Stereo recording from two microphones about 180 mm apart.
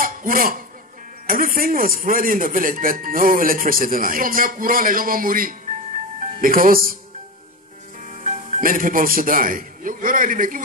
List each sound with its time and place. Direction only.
0.0 s a sound: 50° right (ahead or behind)
1.2 s speech: 50° right (ahead or behind)
8.1 s a man's voice: 45° right (ahead or behind)